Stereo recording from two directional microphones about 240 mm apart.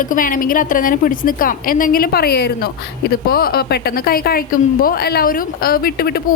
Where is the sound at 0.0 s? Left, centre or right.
Left.